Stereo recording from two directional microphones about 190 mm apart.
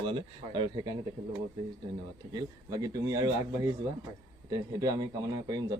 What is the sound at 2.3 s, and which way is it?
A man's voice, 20° right (ahead or behind).